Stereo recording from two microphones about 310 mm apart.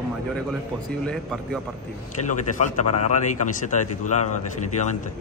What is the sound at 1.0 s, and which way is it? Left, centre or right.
Speech, centre.